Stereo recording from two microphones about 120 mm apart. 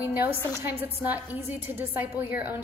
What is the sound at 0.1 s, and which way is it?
A woman's voice, 15° right (ahead or behind).